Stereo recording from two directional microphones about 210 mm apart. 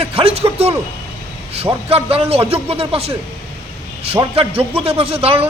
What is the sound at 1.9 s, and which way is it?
A man's voice, 25° right (ahead or behind).